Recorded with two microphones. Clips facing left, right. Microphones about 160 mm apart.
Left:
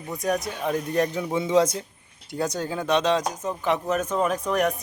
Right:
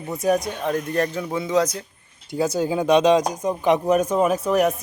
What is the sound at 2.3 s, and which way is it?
Speech, 5° right (ahead or behind).